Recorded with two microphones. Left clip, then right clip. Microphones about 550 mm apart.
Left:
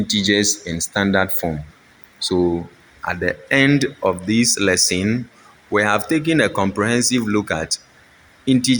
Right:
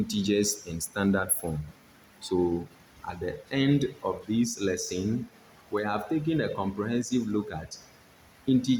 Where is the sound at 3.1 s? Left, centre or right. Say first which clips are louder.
Left 14 dB; centre.